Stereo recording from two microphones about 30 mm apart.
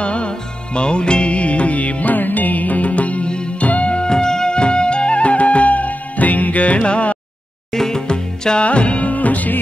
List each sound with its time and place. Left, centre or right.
0.0 s music: left
2.1 s music: left
3.3 s music: left
3.6 s music: left
3.9 s music: left
6.8 s music: left
7.7 s music: centre
8.1 s music: left
8.6 s music: left
9.1 s music: left